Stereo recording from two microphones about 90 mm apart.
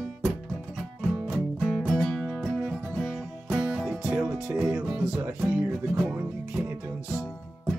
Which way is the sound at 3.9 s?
10° right (ahead or behind).